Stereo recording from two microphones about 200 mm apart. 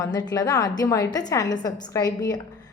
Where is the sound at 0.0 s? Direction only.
20° left (ahead or behind).